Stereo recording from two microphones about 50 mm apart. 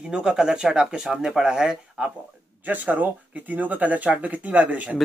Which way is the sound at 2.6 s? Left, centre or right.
Right.